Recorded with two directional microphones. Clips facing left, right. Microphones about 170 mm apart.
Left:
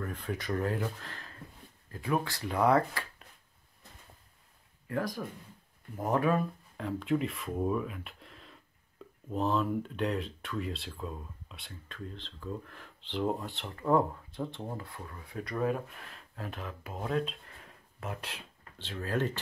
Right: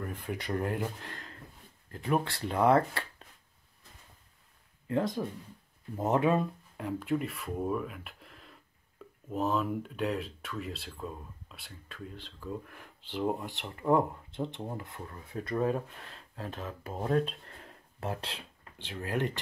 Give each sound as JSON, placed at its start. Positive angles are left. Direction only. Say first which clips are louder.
{"t": 0.0, "sound": "speech", "louder": "left 1 dB", "side_deg": -10}
{"t": 4.8, "sound": "speech", "louder": "right 4 dB", "side_deg": -25}
{"t": 6.8, "sound": "speech", "louder": "left 1 dB", "side_deg": -10}
{"t": 18.6, "sound": "speech", "louder": "left 2 dB", "side_deg": -15}